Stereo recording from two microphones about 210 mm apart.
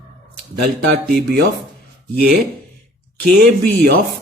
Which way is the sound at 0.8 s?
50° right (ahead or behind).